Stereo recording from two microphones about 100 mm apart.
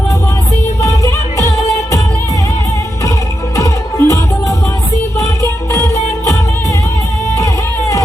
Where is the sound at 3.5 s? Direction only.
30° left (ahead or behind).